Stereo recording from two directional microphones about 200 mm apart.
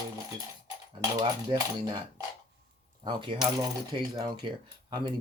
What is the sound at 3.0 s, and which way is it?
Speech, 25° right (ahead or behind).